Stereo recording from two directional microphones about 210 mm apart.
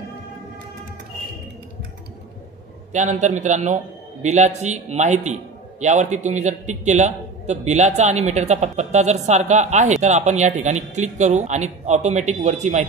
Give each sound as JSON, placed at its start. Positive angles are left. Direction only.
{"t": 2.9, "sound": "a man's voice", "side_deg": -35}